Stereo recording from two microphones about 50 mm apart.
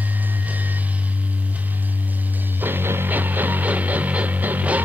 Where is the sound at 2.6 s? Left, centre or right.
Right.